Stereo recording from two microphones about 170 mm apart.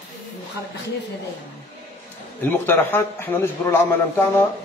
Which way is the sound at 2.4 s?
10° left (ahead or behind).